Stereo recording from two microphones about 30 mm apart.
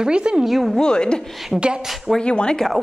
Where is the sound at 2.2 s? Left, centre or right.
Left.